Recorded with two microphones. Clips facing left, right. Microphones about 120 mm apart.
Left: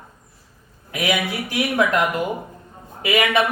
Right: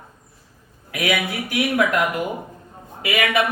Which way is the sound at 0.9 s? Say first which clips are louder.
Even; 25° left (ahead or behind).